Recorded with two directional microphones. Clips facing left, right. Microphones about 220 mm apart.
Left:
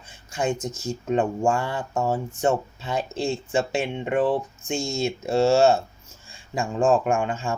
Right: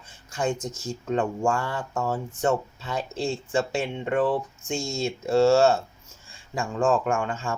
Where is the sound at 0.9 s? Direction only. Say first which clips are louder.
Left 3 dB; 15° left (ahead or behind).